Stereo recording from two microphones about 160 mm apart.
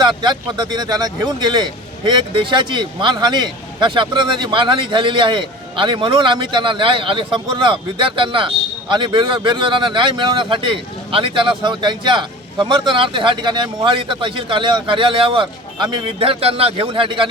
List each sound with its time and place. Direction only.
0.0 s speech: 30° right (ahead or behind)